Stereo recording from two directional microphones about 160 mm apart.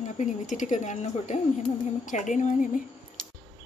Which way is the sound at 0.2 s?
50° left (ahead or behind).